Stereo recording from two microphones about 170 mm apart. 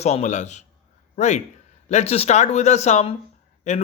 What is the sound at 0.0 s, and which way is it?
Speech, 40° left (ahead or behind).